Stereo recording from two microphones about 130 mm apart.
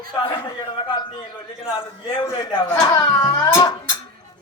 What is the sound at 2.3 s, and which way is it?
A man's voice, 35° left (ahead or behind).